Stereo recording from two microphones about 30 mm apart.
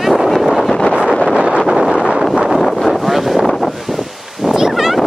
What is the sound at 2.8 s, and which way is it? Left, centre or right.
Wind noise, centre.